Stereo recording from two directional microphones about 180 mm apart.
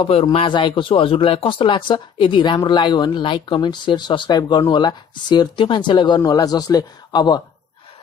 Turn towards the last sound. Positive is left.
turn(degrees=25)  # may be behind; listen again after turning